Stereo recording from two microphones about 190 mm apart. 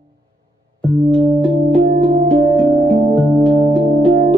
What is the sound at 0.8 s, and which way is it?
Music, 5° left (ahead or behind).